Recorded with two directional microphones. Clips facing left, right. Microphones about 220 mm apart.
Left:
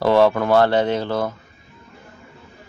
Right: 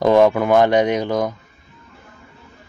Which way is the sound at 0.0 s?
15° right (ahead or behind).